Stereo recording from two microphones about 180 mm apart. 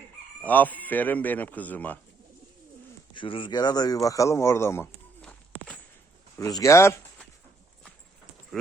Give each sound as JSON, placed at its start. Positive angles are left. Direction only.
{"t": 0.4, "sound": "speech", "side_deg": 10}
{"t": 3.2, "sound": "speech", "side_deg": 30}
{"t": 6.3, "sound": "speech", "side_deg": 15}